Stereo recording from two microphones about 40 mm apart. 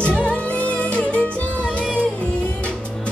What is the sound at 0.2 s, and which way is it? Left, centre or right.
Music, left.